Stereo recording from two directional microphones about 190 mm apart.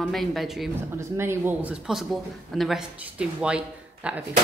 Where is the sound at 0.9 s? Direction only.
15° right (ahead or behind).